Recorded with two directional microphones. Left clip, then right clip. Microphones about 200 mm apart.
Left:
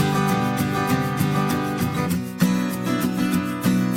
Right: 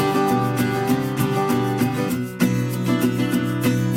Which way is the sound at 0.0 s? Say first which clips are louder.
Right 3 dB; centre (ahead or behind).